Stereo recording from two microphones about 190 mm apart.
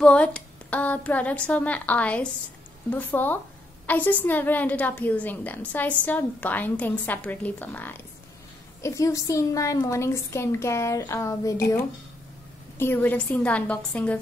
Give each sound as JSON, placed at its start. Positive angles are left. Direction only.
{"t": 0.0, "sound": "a woman's voice", "side_deg": 5}
{"t": 12.7, "sound": "a woman's voice", "side_deg": 10}